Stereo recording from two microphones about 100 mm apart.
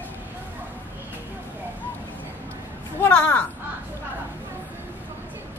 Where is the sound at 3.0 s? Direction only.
15° left (ahead or behind).